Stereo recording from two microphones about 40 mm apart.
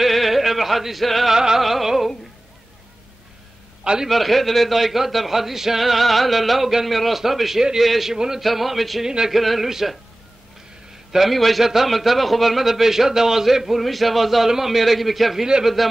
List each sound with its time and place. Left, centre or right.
0.0 s music: centre
1.3 s a man's voice: centre
3.8 s a man's voice: right
4.1 s a man's voice: centre
9.0 s a man's voice: centre
9.3 s a man's voice: centre
11.1 s a man's voice: centre